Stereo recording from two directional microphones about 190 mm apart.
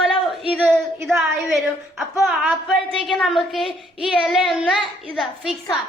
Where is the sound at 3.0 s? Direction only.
Centre (ahead or behind).